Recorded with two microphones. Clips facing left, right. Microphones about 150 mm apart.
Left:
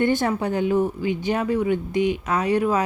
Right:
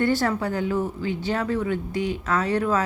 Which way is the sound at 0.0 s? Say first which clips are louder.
Left 1 dB; 20° left (ahead or behind).